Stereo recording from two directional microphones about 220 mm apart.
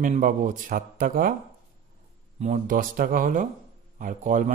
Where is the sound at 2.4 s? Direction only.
35° right (ahead or behind).